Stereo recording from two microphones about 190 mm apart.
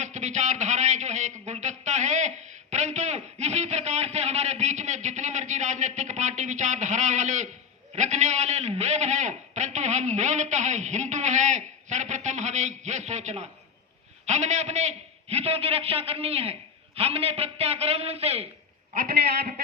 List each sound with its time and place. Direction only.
0.0 s a sound: 40° right (ahead or behind)
7.9 s a man's voice: 40° right (ahead or behind)
18.9 s a man's voice: 50° right (ahead or behind)